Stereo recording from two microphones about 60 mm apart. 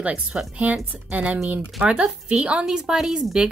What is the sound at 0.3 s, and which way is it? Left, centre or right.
Speech, centre.